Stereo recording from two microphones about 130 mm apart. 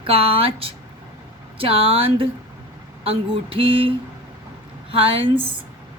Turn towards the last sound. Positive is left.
turn(degrees=-45)  # may be behind; listen again after turning